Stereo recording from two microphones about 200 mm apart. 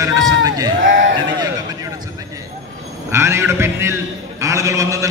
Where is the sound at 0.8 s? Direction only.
65° right (ahead or behind).